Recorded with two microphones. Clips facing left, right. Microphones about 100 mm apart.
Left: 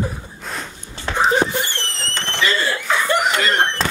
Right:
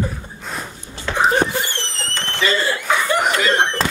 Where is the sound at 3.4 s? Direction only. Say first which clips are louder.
Right 1 dB; centre (ahead or behind).